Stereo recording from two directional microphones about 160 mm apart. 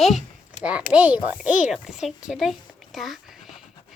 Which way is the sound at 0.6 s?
5° right (ahead or behind).